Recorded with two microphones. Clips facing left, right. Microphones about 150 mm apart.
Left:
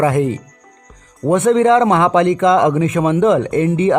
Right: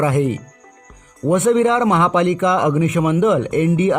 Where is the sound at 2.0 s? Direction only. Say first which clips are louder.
Left 3 dB; 20° left (ahead or behind).